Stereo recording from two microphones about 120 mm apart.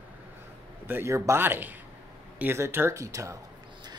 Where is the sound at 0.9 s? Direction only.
20° right (ahead or behind).